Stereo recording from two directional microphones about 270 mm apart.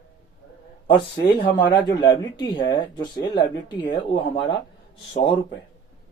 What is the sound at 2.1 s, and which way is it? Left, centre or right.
Speech, centre.